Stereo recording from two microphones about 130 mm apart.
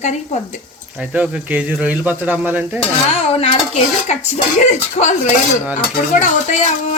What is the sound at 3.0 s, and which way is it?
Dishes, 50° left (ahead or behind).